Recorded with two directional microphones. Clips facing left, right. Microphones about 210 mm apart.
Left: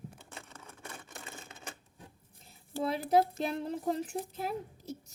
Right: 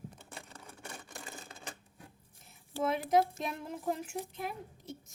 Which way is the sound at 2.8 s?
35° left (ahead or behind).